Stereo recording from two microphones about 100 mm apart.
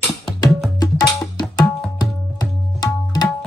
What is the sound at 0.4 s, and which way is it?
Tabla, 40° left (ahead or behind).